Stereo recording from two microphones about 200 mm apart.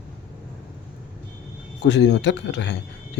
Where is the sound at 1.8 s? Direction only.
60° left (ahead or behind).